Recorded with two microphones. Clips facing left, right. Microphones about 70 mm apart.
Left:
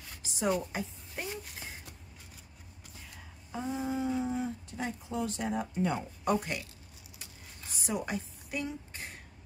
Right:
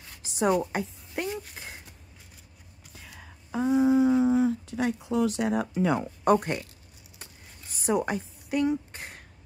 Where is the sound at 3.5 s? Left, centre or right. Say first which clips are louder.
Right 12 dB; right.